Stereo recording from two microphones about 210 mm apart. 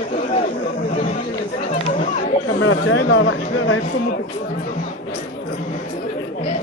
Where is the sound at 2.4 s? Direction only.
65° left (ahead or behind).